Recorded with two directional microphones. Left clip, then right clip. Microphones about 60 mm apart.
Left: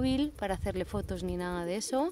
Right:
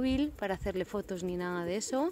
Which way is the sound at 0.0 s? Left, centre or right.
Left.